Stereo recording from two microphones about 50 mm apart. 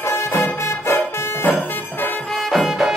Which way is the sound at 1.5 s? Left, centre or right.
Left.